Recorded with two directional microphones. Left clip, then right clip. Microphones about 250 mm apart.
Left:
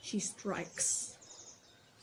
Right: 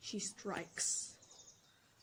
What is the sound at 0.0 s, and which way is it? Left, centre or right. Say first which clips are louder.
Speech: left 4 dB; centre.